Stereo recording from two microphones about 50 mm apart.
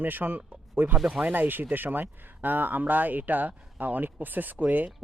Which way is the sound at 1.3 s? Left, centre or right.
Right.